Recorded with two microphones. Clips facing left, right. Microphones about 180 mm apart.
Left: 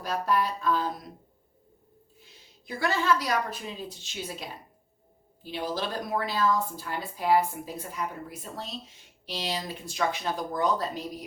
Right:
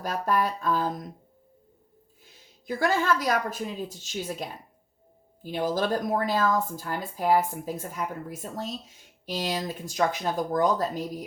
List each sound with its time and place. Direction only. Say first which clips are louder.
0.0 s speech: right 1 dB; 45° right (ahead or behind)
2.6 s speech: right 2 dB; 45° right (ahead or behind)